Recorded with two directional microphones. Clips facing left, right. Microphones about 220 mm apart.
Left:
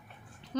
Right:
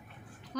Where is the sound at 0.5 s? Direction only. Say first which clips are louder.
Left 4 dB; 25° left (ahead or behind).